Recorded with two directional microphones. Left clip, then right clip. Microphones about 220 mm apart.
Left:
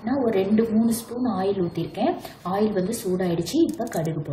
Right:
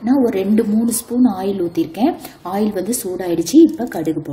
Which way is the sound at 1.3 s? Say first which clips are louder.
Right 5 dB; 50° right (ahead or behind).